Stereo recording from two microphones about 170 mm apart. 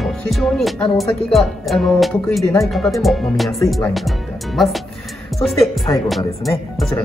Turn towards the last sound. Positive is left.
turn(degrees=0)  # may be behind; listen again after turning